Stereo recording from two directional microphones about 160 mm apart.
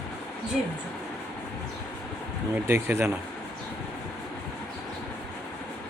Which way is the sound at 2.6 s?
15° right (ahead or behind).